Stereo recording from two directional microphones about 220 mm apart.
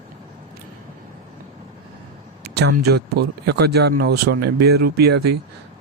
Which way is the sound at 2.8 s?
45° right (ahead or behind).